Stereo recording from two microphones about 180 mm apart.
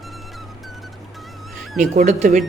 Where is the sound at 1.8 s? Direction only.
40° right (ahead or behind).